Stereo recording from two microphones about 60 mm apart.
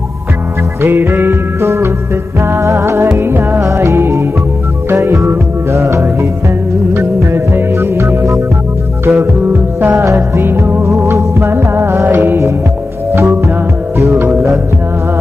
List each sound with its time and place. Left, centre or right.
0.8 s music: right
3.6 s music: right
9.0 s music: right
9.9 s music: right